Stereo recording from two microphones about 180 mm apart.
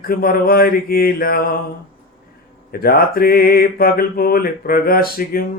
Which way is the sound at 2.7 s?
55° left (ahead or behind).